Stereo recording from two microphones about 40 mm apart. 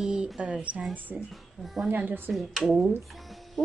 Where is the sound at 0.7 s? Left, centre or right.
Right.